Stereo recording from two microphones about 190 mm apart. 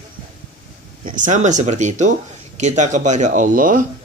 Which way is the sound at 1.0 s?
40° right (ahead or behind).